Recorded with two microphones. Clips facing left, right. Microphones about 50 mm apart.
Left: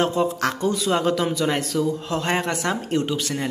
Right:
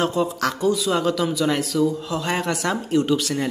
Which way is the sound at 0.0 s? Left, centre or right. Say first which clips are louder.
Even; left.